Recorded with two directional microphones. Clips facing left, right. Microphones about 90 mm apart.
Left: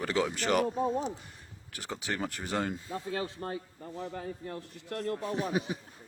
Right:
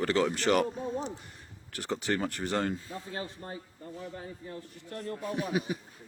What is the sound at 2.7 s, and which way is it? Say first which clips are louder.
Speech: even; 20° left (ahead or behind).